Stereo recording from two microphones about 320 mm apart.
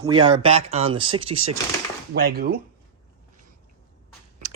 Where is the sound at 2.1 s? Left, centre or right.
Right.